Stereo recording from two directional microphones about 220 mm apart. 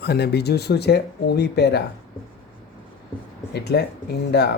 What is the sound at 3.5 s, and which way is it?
Speech, 50° left (ahead or behind).